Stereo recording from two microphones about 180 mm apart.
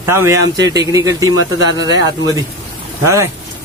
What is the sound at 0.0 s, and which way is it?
Speech, 15° right (ahead or behind).